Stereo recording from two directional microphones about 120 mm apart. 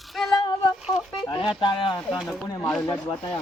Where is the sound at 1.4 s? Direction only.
40° left (ahead or behind).